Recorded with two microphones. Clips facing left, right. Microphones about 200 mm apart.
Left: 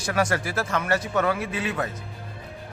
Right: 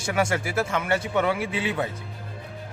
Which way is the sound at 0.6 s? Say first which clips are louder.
Even; 10° right (ahead or behind).